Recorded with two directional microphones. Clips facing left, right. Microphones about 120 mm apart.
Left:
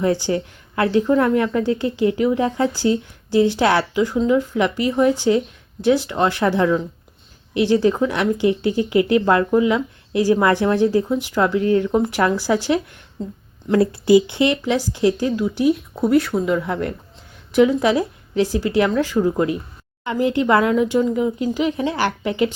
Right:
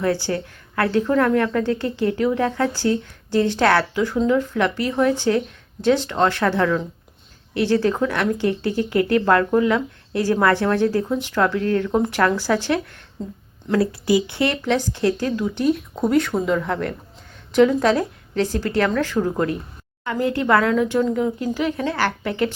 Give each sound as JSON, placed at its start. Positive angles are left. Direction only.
{"t": 0.0, "sound": "speech", "side_deg": 15}
{"t": 13.7, "sound": "speech", "side_deg": 25}